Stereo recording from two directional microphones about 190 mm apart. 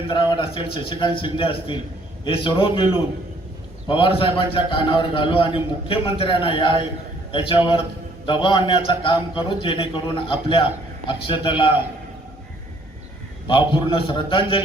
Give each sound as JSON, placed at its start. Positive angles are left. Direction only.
{"t": 0.1, "sound": "a man's voice", "side_deg": 25}
{"t": 8.3, "sound": "a man's voice", "side_deg": 25}
{"t": 13.5, "sound": "a man's voice", "side_deg": 25}